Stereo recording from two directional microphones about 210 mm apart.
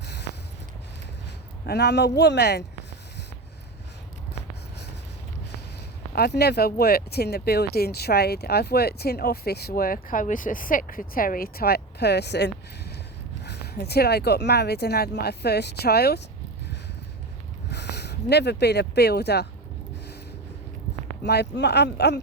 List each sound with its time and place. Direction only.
0.0 s a sound: 55° left (ahead or behind)
1.6 s speech: 50° left (ahead or behind)
6.1 s speech: 50° left (ahead or behind)
17.7 s speech: 50° left (ahead or behind)
21.2 s speech: 50° left (ahead or behind)